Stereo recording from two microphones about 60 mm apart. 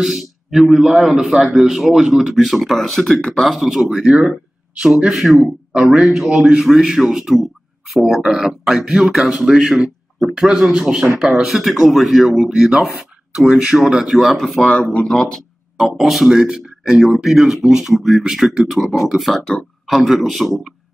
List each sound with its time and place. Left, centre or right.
0.0 s speech: centre
14.6 s speech: centre
15.8 s speech: centre